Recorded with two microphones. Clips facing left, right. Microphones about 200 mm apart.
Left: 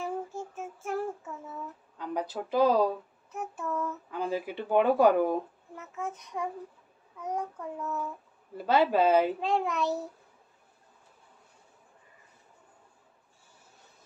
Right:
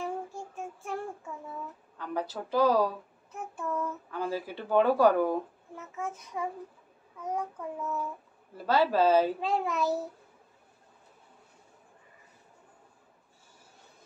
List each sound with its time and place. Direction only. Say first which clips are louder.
0.0 s child singing: left 1 dB; centre (ahead or behind)
2.0 s speech: left 1 dB; 15° left (ahead or behind)
3.3 s child singing: left 1 dB; centre (ahead or behind)
4.1 s speech: left 3 dB; 15° left (ahead or behind)
5.8 s child singing: even; centre (ahead or behind)
8.6 s speech: left 1 dB; 20° left (ahead or behind)
9.4 s child singing: left 1 dB; centre (ahead or behind)